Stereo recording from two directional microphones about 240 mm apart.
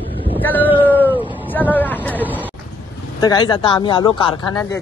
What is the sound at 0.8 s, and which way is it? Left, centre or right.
Speech, centre.